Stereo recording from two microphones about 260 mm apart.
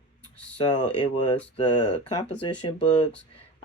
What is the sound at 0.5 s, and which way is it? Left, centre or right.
Speech, centre.